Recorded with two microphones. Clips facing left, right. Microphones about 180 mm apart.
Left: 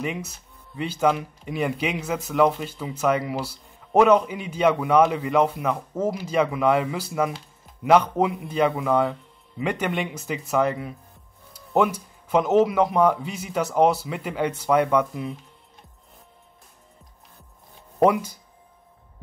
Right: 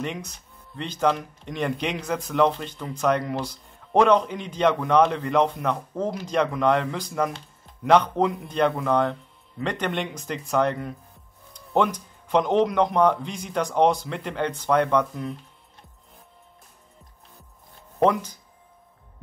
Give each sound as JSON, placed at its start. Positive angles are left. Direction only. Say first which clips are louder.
{"t": 0.0, "sound": "speech", "louder": "left 2 dB", "side_deg": 5}
{"t": 17.9, "sound": "speech", "louder": "left 2 dB", "side_deg": 10}